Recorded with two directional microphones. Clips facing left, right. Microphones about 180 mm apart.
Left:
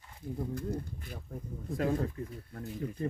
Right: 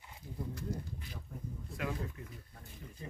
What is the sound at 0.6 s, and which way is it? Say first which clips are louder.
Speech: left 5 dB; 50° left (ahead or behind).